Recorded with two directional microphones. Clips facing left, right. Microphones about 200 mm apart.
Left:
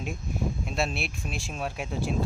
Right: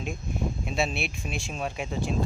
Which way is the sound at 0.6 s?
Centre (ahead or behind).